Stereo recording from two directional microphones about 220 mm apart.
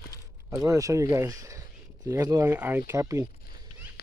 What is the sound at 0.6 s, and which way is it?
Speech, 15° right (ahead or behind).